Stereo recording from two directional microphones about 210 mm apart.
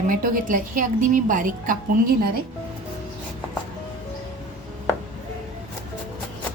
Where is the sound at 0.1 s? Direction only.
40° right (ahead or behind).